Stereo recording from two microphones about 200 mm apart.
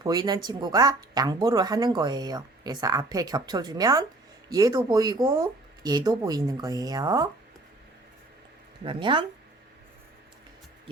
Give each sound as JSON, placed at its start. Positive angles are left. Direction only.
{"t": 0.0, "sound": "speech", "side_deg": -20}
{"t": 8.8, "sound": "speech", "side_deg": -25}